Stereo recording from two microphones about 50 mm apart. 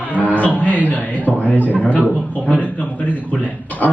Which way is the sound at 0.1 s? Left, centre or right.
Left.